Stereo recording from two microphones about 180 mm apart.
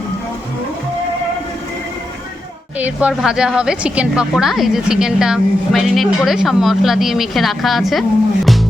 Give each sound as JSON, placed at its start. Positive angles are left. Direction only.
{"t": 2.7, "sound": "a woman's voice", "side_deg": -10}